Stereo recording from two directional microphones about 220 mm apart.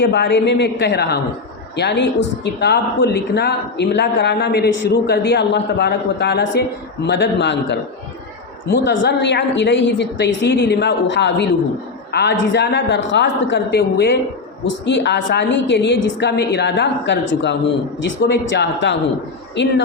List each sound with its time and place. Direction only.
0.0 s a woman's voice: 50° left (ahead or behind)